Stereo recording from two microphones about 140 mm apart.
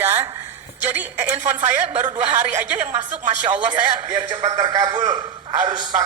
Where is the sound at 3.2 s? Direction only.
60° right (ahead or behind).